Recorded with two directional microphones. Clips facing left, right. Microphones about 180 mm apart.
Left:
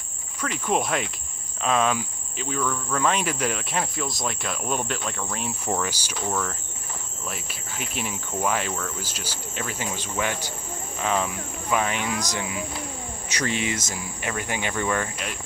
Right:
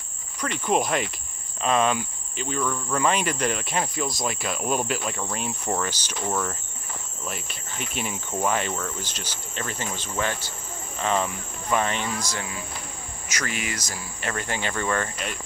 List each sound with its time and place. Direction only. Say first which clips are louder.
0.4 s speech: right 1 dB; centre (ahead or behind)
6.2 s speech: right 1 dB; 10° right (ahead or behind)
7.2 s speech: right 1 dB; 5° left (ahead or behind)
13.3 s speech: left 4 dB; 30° left (ahead or behind); by 15.3 s 5° left (ahead or behind)